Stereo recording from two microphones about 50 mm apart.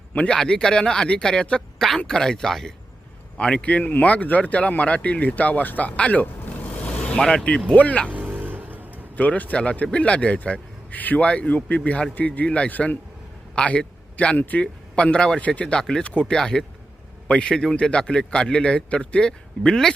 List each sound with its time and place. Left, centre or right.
0.3 s a man's voice: centre
3.3 s speech: left
7.8 s speech: left
8.1 s vehicle: right
9.1 s a man's voice: left
14.3 s a man's voice: left
14.6 s a man's voice: left
16.0 s a man's voice: left